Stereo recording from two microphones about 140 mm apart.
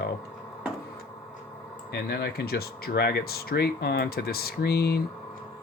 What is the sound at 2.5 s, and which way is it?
Speech, 90° left.